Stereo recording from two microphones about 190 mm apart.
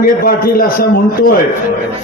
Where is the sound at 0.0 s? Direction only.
50° left (ahead or behind).